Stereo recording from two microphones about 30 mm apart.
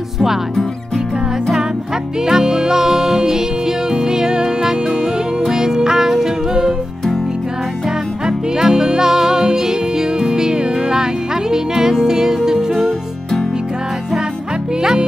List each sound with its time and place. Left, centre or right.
2.2 s music: right
8.5 s music: centre
14.8 s music: right